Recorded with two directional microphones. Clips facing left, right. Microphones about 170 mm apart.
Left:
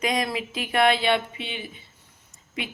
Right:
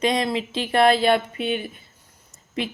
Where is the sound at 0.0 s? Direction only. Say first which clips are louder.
Right 4 dB; 30° right (ahead or behind); by 1.6 s 50° right (ahead or behind).